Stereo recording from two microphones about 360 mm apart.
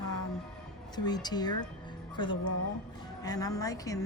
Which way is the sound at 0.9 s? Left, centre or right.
Centre.